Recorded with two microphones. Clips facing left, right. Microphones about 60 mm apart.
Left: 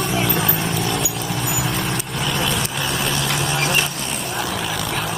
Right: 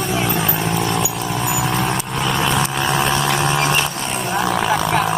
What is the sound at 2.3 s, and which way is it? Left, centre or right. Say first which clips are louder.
Vehicle: right 5 dB; right.